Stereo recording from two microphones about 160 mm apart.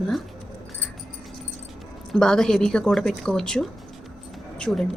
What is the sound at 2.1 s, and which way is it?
A woman's voice, 5° left (ahead or behind).